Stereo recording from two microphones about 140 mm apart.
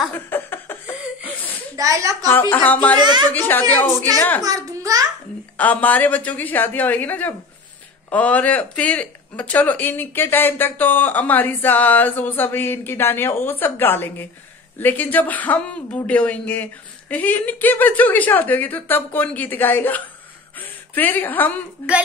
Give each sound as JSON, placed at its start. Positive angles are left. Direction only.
{"t": 0.3, "sound": "chuckle", "side_deg": 15}
{"t": 1.8, "sound": "a woman's voice", "side_deg": -25}
{"t": 2.5, "sound": "speech", "side_deg": 10}
{"t": 3.0, "sound": "a woman's voice", "side_deg": -30}
{"t": 3.3, "sound": "speech", "side_deg": 15}
{"t": 4.4, "sound": "a child's voice", "side_deg": -25}
{"t": 5.6, "sound": "a woman's voice", "side_deg": 10}